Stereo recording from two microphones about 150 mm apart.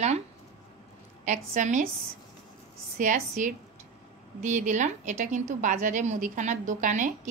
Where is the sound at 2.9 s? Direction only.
60° right (ahead or behind).